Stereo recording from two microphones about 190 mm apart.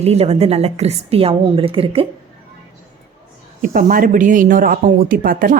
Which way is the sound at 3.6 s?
45° right (ahead or behind).